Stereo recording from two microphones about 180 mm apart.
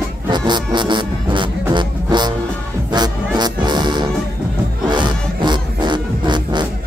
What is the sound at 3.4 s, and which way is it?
Music, 25° right (ahead or behind).